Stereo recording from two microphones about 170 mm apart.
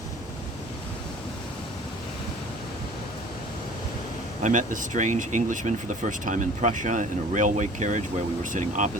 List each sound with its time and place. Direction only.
4.4 s speech: 50° right (ahead or behind)